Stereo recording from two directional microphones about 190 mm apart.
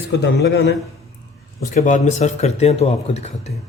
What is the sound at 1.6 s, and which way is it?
A man's voice, 40° left (ahead or behind).